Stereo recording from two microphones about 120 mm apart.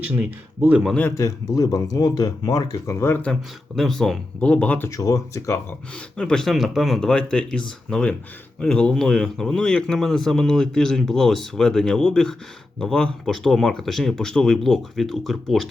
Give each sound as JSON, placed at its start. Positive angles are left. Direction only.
{"t": 0.0, "sound": "speech", "side_deg": -15}
{"t": 1.1, "sound": "speech", "side_deg": 30}
{"t": 3.8, "sound": "speech", "side_deg": 0}
{"t": 4.9, "sound": "speech", "side_deg": 30}
{"t": 6.1, "sound": "a man's voice", "side_deg": 5}